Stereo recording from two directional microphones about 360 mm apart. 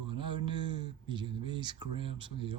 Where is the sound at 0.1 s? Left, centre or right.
Centre.